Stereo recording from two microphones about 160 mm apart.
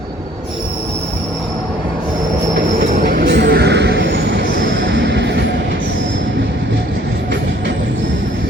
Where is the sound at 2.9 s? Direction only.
60° right (ahead or behind); by 4.4 s 90° right.